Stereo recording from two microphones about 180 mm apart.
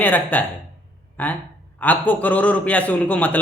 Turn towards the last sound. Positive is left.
turn(degrees=10)  # may be behind; listen again after turning